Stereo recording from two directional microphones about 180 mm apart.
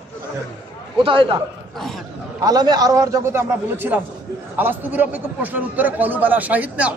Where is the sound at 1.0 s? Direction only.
30° right (ahead or behind).